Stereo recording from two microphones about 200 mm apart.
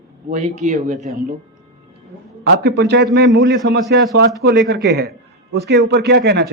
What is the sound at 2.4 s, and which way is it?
A man's voice, 55° right (ahead or behind).